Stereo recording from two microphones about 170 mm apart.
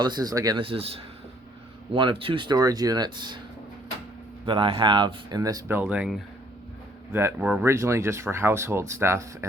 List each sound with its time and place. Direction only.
0.0 s speech: 25° right (ahead or behind)
4.4 s speech: 30° right (ahead or behind)